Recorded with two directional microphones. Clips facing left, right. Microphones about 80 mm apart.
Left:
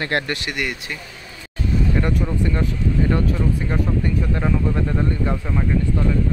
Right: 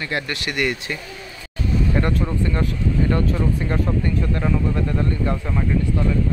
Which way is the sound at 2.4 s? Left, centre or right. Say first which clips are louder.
Even; centre.